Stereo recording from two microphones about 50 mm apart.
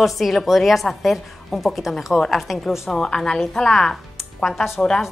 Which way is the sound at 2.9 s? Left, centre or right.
Centre.